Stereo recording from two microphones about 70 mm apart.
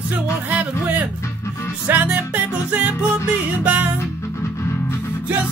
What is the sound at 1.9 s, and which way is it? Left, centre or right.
Music, right.